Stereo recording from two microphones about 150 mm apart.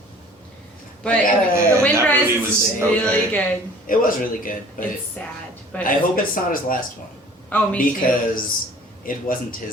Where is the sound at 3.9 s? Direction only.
65° left (ahead or behind).